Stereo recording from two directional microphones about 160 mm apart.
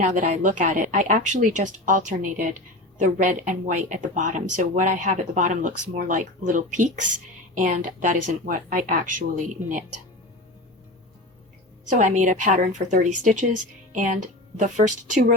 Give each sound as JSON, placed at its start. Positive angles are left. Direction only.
{"t": 0.0, "sound": "speech", "side_deg": -50}
{"t": 11.9, "sound": "speech", "side_deg": -50}